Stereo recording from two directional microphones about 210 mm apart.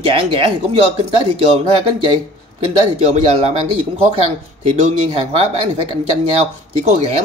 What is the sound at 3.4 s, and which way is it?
Speech, 25° right (ahead or behind).